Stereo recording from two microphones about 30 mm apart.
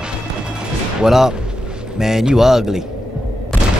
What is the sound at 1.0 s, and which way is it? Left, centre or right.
Speech, centre.